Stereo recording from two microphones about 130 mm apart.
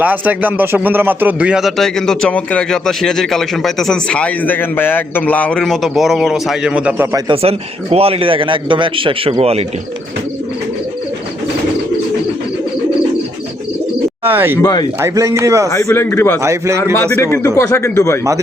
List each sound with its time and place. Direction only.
0.0 s speech: 10° right (ahead or behind)
7.3 s a man's voice: 50° right (ahead or behind)
14.3 s speech: 15° right (ahead or behind)
14.6 s speech: 30° left (ahead or behind)
15.0 s speech: 25° right (ahead or behind)
15.7 s a man's voice: 20° left (ahead or behind)
16.4 s speech: 20° right (ahead or behind)
16.9 s a man's voice: 20° left (ahead or behind)